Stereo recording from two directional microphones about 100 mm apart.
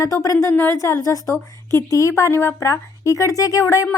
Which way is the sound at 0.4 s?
20° left (ahead or behind).